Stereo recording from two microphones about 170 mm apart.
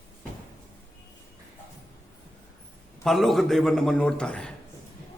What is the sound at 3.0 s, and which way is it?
A man's voice, centre (ahead or behind).